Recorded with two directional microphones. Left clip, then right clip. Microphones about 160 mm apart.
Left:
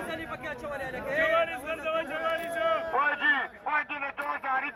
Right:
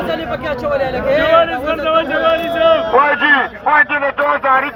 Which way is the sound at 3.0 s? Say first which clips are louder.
Right 14 dB; 30° right (ahead or behind).